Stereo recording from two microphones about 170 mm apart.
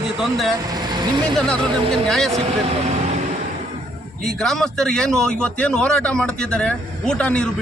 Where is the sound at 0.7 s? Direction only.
25° right (ahead or behind).